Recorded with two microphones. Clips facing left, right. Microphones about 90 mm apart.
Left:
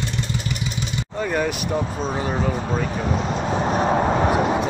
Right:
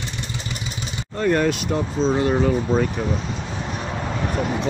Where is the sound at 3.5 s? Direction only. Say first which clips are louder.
Left 9 dB; 45° left (ahead or behind).